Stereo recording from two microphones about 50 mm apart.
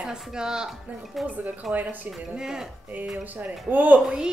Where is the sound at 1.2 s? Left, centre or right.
Right.